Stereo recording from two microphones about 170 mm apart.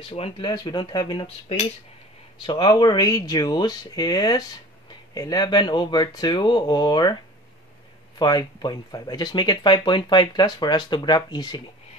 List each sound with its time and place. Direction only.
0.1 s speech: 30° left (ahead or behind)
2.4 s speech: 25° left (ahead or behind)
8.2 s speech: 25° left (ahead or behind)